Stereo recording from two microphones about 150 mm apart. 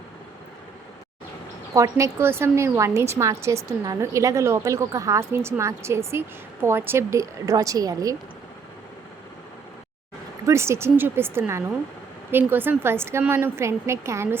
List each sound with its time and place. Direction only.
1.7 s a woman's voice: 20° right (ahead or behind)
10.4 s a woman's voice: 20° right (ahead or behind)